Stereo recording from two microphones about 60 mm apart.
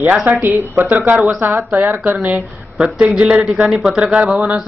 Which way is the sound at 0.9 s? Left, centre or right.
Right.